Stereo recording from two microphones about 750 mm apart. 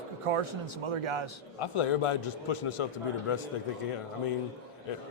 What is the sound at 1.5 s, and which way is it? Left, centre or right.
A man's voice, left.